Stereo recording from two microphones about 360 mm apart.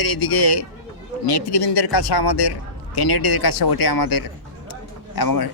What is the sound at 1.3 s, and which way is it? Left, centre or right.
Speech, left.